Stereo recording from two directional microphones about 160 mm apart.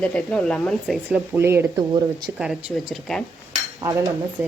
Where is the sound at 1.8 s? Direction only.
25° right (ahead or behind).